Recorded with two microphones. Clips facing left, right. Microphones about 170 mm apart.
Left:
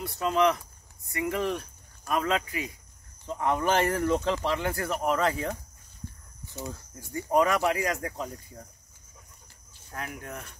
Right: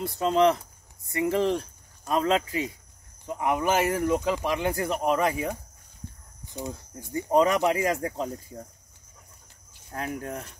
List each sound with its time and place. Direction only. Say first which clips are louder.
0.0 s speech: right 3 dB; 30° right (ahead or behind)
3.3 s speech: right 1 dB; 15° right (ahead or behind)
9.8 s speech: right 6 dB; 30° right (ahead or behind)